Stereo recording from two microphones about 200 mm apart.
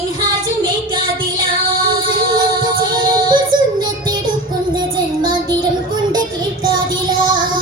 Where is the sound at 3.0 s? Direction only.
20° right (ahead or behind).